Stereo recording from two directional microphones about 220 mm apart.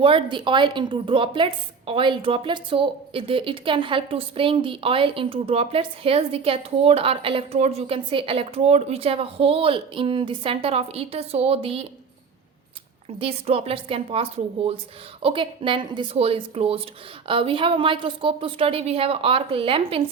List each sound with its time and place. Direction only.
0.0 s a woman's voice: 25° right (ahead or behind)
13.1 s a woman's voice: 25° right (ahead or behind)